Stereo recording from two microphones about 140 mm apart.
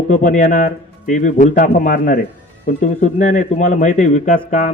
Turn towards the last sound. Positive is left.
turn(degrees=60)  # may be behind; listen again after turning